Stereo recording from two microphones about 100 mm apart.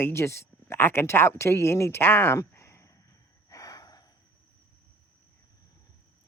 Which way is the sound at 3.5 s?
35° left (ahead or behind).